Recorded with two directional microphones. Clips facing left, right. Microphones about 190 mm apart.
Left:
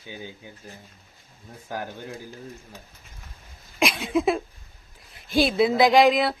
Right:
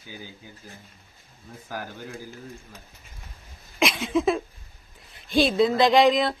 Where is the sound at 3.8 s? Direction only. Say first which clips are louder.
Even; centre (ahead or behind).